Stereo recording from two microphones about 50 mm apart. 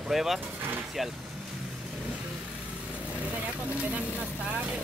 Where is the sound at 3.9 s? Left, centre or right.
Right.